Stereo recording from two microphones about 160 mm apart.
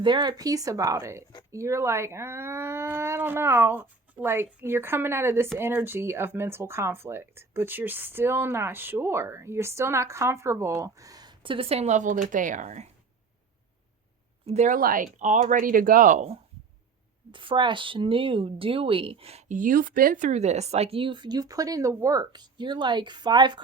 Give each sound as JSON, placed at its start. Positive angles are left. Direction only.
{"t": 0.0, "sound": "speech", "side_deg": -30}
{"t": 14.4, "sound": "speech", "side_deg": -45}
{"t": 17.3, "sound": "speech", "side_deg": -30}